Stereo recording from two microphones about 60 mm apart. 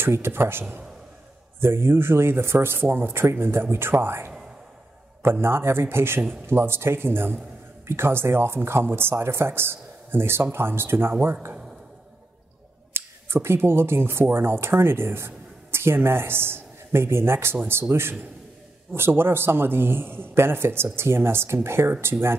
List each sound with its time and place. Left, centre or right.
0.0 s speech: right
12.9 s speech: right